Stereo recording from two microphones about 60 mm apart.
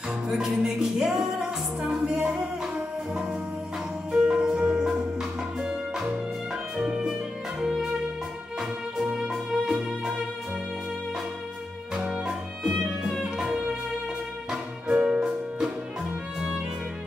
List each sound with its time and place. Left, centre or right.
0.3 s speech: centre
4.1 s music: centre
11.9 s music: centre